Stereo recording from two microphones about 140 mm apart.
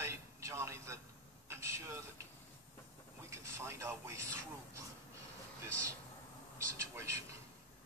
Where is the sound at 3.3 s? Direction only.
20° right (ahead or behind).